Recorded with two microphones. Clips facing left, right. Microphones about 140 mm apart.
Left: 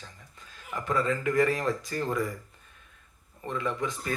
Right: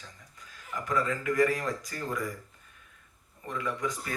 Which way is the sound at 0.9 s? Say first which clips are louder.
Left 2 dB; 30° left (ahead or behind).